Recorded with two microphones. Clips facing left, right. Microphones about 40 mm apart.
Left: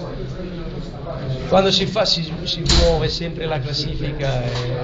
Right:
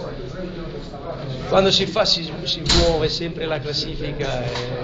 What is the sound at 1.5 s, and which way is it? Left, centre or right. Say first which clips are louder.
A man's voice: left 1 dB; centre.